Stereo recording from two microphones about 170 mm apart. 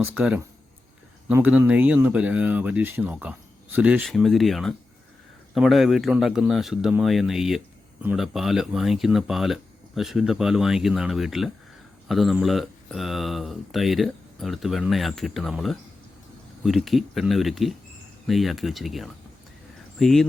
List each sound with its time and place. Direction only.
0.0 s speech: 5° right (ahead or behind)
4.0 s speech: centre (ahead or behind)